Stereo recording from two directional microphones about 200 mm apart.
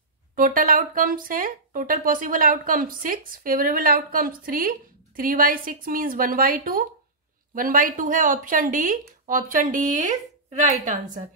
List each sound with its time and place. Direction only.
0.4 s speech: 45° right (ahead or behind)